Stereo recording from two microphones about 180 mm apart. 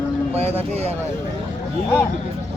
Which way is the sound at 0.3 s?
35° right (ahead or behind).